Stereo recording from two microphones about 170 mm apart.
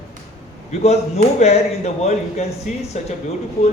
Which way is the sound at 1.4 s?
40° left (ahead or behind).